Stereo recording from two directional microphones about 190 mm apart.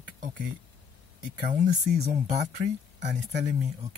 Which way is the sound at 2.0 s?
35° right (ahead or behind).